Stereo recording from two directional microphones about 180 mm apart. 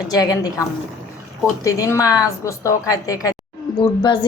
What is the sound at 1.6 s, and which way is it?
A woman's voice, 15° left (ahead or behind).